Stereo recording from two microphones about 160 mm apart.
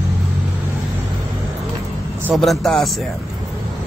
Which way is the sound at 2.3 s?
Centre (ahead or behind).